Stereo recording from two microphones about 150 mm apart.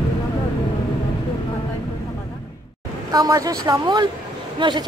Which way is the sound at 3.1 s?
25° right (ahead or behind).